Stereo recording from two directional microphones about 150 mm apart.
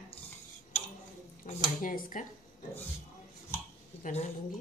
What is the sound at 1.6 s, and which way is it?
Speech, 65° left (ahead or behind).